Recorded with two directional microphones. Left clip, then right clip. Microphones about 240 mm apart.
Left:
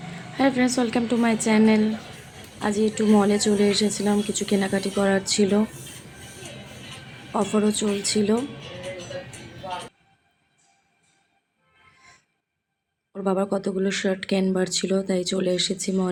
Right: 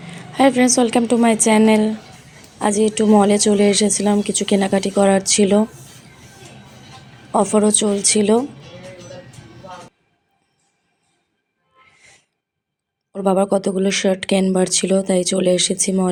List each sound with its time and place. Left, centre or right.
0.3 s a sound: right
0.8 s a woman's voice: right
7.3 s a woman's voice: right
11.9 s music: right
13.1 s a woman's voice: right